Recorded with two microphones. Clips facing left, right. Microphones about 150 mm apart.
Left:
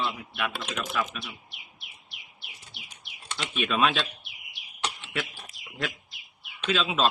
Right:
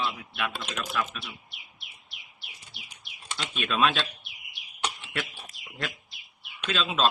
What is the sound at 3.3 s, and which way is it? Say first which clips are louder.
Speech: left 1 dB; 5° left (ahead or behind).